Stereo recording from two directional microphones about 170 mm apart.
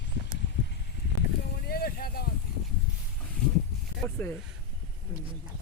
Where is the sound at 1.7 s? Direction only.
60° left (ahead or behind).